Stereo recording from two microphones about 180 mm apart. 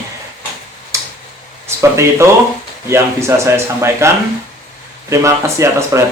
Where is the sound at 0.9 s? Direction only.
15° right (ahead or behind).